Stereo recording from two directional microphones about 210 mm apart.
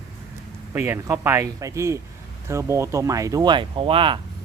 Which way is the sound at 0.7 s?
10° right (ahead or behind).